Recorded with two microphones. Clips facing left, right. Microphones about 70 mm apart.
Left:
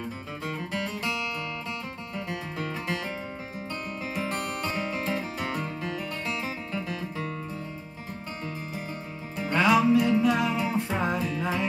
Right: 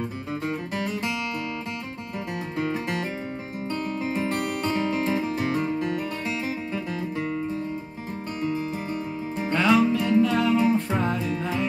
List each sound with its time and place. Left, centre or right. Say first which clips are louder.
2.1 s music: right 4 dB; centre
5.8 s music: right 5 dB; centre
9.5 s music: even; centre